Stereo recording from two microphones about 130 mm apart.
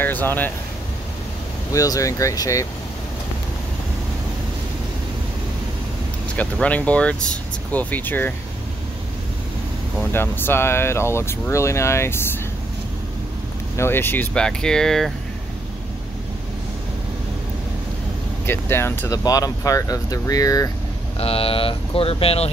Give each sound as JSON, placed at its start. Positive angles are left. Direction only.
{"t": 0.0, "sound": "speech", "side_deg": 15}
{"t": 1.7, "sound": "speech", "side_deg": 25}
{"t": 6.3, "sound": "speech", "side_deg": 10}
{"t": 10.1, "sound": "speech", "side_deg": 15}
{"t": 13.7, "sound": "speech", "side_deg": 15}
{"t": 18.4, "sound": "speech", "side_deg": 15}
{"t": 21.2, "sound": "speech", "side_deg": 45}